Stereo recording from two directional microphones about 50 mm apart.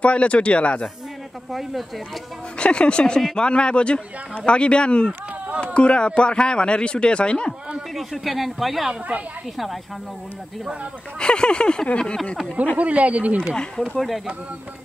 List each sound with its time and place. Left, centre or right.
0.0 s speech: left
1.5 s speech: centre
2.6 s speech: left
7.9 s speech: centre
11.1 s a sound: centre
12.7 s speech: right
13.9 s speech: centre